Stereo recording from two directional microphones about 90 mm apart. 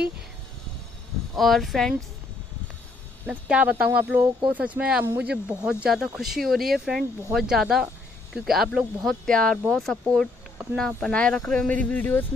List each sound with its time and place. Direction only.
1.3 s speech: centre (ahead or behind)
3.3 s speech: 15° right (ahead or behind)
5.0 s speech: 25° right (ahead or behind)
5.3 s speech: 10° right (ahead or behind); by 12.3 s 20° left (ahead or behind)